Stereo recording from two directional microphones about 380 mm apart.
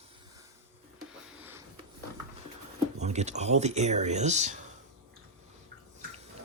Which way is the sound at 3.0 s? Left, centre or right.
Centre.